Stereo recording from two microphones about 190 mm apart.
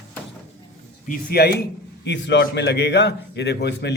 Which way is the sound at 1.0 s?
55° left (ahead or behind).